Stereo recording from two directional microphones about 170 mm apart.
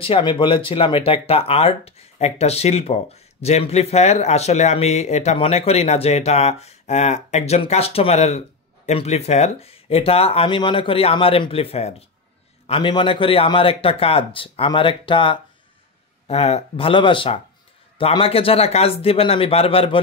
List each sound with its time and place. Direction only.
0.0 s speech: 30° left (ahead or behind)